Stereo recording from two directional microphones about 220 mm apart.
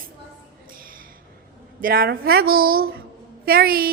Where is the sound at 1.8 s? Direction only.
45° right (ahead or behind).